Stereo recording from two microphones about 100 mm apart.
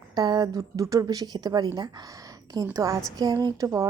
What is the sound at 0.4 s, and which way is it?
A woman's voice, 35° right (ahead or behind).